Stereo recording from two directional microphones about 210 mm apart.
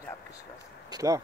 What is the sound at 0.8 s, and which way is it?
Speech, 15° right (ahead or behind).